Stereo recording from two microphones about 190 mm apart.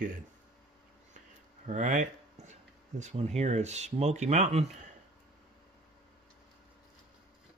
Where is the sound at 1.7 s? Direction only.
40° right (ahead or behind).